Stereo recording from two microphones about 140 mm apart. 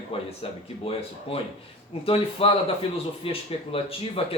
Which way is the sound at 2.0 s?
40° left (ahead or behind).